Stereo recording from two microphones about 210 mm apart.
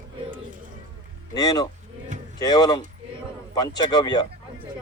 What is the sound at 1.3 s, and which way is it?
Speech, 20° left (ahead or behind).